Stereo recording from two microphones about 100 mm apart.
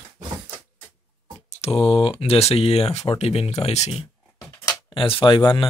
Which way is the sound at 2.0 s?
75° left (ahead or behind).